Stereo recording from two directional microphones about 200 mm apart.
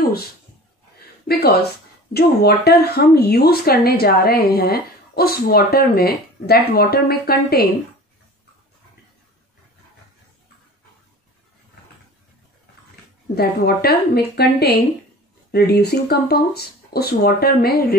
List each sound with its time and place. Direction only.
2.1 s speech: 50° left (ahead or behind)
13.3 s speech: 50° left (ahead or behind)